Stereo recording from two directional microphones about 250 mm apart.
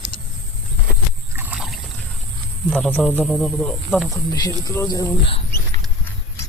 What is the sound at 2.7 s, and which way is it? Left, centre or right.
Speech, centre.